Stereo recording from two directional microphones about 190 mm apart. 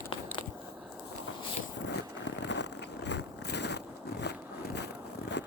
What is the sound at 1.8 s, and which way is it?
Vehicle, 65° left (ahead or behind).